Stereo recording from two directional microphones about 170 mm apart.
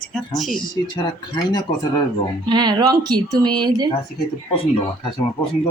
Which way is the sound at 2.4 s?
25° right (ahead or behind).